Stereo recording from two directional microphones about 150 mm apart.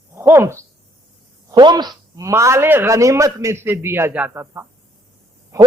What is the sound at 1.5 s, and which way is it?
Speech, 30° right (ahead or behind).